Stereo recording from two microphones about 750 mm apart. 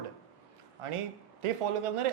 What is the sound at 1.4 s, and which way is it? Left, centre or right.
Speech, right.